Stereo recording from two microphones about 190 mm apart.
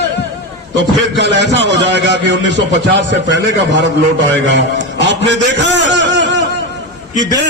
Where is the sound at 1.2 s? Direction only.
65° right (ahead or behind).